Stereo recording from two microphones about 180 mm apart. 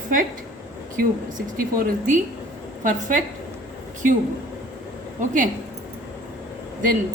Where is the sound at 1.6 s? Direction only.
50° right (ahead or behind).